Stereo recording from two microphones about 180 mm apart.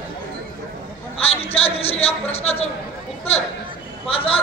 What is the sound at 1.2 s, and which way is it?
A man's voice, 35° left (ahead or behind).